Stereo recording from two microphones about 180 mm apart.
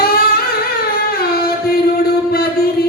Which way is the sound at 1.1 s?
60° left (ahead or behind).